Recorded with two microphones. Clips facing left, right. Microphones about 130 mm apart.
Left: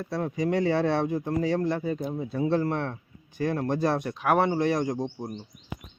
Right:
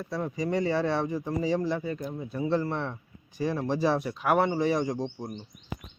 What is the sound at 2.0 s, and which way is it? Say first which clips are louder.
Speech: left 4 dB; 15° left (ahead or behind).